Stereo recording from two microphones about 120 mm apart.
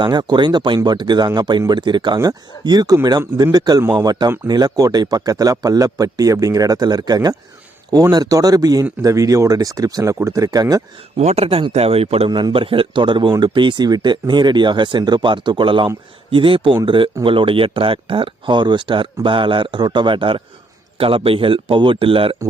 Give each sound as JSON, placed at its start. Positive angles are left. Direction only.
{"t": 0.0, "sound": "a man's voice", "side_deg": -40}
{"t": 11.2, "sound": "a man's voice", "side_deg": -60}